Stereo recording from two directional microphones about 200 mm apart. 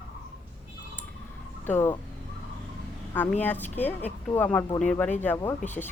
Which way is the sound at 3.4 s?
10° left (ahead or behind).